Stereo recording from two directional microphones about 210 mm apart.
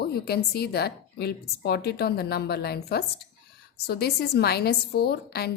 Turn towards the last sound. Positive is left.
turn(degrees=50)  # may be behind; listen again after turning